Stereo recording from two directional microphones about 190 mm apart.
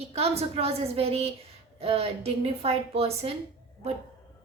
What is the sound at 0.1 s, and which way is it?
A woman's voice, 35° right (ahead or behind).